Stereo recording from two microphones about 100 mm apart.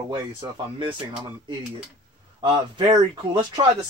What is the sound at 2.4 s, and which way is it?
A man's voice, 50° right (ahead or behind).